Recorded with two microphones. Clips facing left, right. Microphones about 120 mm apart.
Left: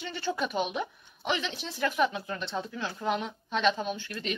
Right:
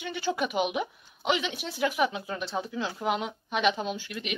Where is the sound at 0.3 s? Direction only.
10° right (ahead or behind).